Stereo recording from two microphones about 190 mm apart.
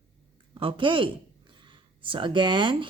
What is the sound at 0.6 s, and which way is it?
Speech, 25° right (ahead or behind).